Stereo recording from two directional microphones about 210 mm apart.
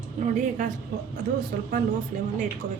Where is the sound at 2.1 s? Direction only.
40° right (ahead or behind).